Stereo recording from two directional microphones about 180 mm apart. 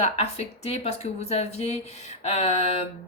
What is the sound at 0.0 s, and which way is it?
Speech, 35° left (ahead or behind).